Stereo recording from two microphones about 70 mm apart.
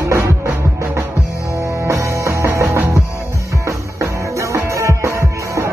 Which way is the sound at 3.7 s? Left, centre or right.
Right.